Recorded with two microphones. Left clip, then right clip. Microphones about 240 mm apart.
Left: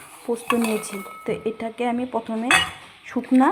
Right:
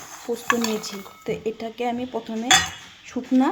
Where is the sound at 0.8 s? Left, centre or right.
Centre.